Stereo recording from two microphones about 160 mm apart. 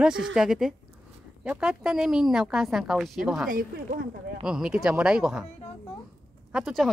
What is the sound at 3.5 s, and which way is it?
Speech, 60° right (ahead or behind).